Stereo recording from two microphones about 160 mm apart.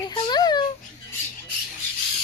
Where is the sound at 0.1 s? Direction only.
30° left (ahead or behind).